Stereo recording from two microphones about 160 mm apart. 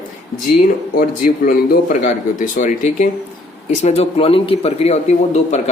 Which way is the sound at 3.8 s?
40° left (ahead or behind).